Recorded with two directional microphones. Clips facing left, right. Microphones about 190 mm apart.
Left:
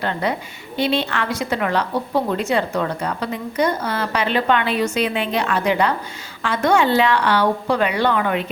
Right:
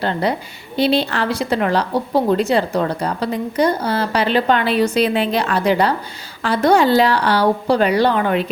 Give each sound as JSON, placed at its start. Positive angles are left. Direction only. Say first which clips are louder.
{"t": 0.0, "sound": "a woman's voice", "louder": "right 3 dB", "side_deg": -35}